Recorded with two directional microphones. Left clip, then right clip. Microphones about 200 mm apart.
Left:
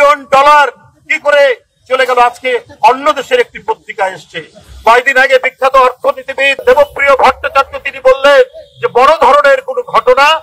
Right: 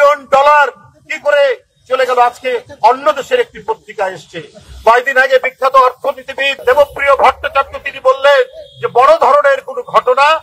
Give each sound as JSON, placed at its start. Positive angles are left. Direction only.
{"t": 0.0, "sound": "a man's voice", "side_deg": 25}